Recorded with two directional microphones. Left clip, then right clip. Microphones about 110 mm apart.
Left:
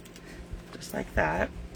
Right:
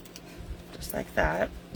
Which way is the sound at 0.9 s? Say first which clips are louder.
Right 1 dB; 15° left (ahead or behind).